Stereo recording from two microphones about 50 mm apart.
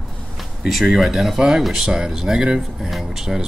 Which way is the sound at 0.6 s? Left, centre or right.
Centre.